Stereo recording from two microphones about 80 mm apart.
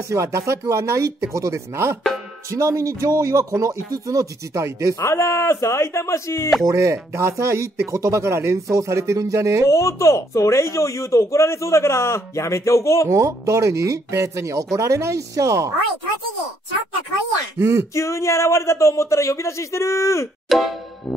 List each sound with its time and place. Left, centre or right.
0.1 s speech: right
5.0 s speech: left
6.7 s speech: right
9.7 s speech: left
13.1 s speech: right
17.6 s speech: right
17.9 s speech: left
20.4 s music: centre